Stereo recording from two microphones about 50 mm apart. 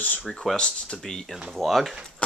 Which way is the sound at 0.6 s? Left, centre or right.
Centre.